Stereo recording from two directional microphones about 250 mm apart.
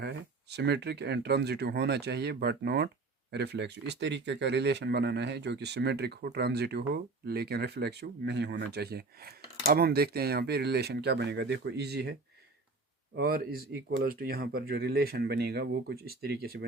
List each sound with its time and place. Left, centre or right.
0.0 s speech: right
13.1 s speech: right